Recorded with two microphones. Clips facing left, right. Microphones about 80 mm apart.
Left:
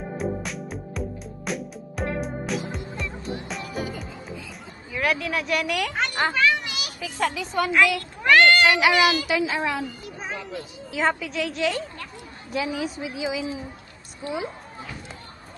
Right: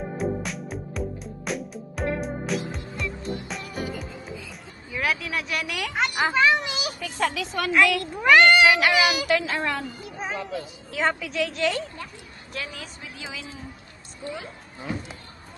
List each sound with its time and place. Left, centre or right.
0.2 s music: centre
4.9 s speech: centre
6.1 s speech: centre
7.0 s a woman's voice: centre